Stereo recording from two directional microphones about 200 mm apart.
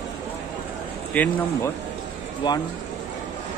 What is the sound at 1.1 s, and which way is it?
Speech, 5° left (ahead or behind).